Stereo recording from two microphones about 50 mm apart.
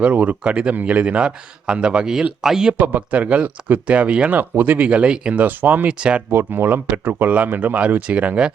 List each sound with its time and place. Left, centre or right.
0.0 s speech: right; by 2.7 s centre
2.7 s speech: right
4.9 s speech: right
5.3 s speech: right
5.9 s speech: centre
6.3 s speech: right
7.3 s speech: right